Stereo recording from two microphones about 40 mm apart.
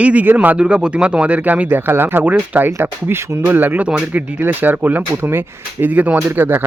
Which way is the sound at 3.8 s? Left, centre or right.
Right.